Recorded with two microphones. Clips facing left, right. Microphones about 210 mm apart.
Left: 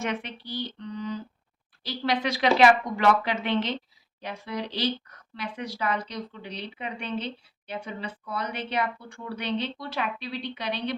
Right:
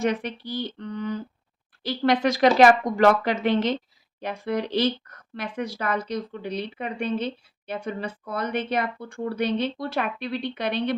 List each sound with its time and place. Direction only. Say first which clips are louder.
0.0 s speech: right 6 dB; 40° right (ahead or behind)